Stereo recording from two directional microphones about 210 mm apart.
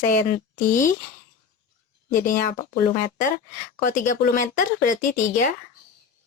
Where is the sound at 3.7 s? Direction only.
40° left (ahead or behind).